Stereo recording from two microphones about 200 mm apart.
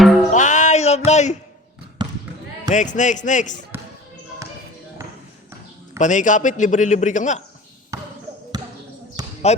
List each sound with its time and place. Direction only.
0.0 s music: centre (ahead or behind)
0.3 s a sound: 35° left (ahead or behind)
2.0 s basketball bounce: 20° right (ahead or behind)
2.6 s a man's voice: 40° left (ahead or behind)
6.0 s a man's voice: 40° left (ahead or behind)
7.9 s basketball bounce: 15° right (ahead or behind)
9.4 s a man's voice: 35° left (ahead or behind)